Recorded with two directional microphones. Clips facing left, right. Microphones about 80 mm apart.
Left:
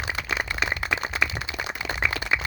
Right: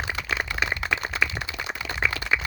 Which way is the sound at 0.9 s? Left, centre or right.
Centre.